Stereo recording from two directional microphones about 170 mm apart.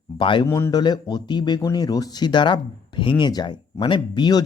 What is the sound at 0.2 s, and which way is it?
Speech, 30° left (ahead or behind).